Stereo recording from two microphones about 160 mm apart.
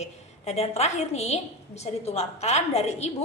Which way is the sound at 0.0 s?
40° left (ahead or behind).